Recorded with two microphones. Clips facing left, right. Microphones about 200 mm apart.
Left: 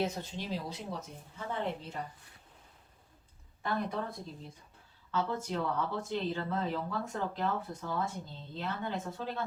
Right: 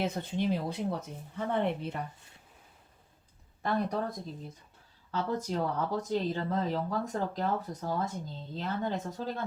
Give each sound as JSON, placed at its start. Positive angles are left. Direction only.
{"t": 0.0, "sound": "a woman's voice", "side_deg": -55}
{"t": 3.6, "sound": "speech", "side_deg": -40}
{"t": 5.1, "sound": "speech", "side_deg": -40}